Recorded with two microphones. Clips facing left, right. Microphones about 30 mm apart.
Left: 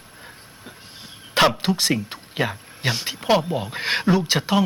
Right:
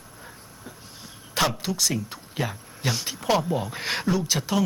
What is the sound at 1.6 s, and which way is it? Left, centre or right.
A woman's voice, left.